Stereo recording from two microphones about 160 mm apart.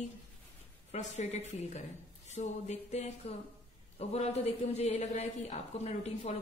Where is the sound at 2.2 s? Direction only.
45° left (ahead or behind).